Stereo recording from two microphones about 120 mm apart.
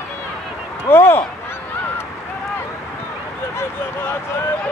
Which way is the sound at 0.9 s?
20° left (ahead or behind).